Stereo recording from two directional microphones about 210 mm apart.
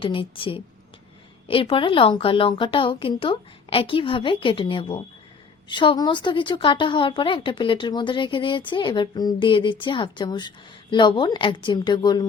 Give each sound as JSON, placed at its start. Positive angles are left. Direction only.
{"t": 0.0, "sound": "speech", "side_deg": 25}